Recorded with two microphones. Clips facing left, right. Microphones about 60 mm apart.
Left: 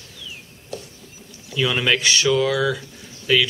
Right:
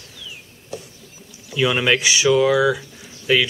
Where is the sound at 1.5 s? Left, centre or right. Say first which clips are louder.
Right 2 dB; centre.